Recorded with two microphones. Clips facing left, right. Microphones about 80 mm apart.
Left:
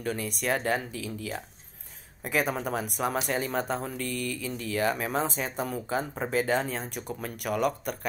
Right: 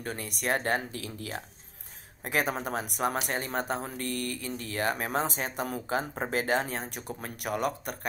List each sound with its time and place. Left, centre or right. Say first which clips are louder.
0.0 s speech: left 3 dB; right
2.4 s speech: left 2 dB; right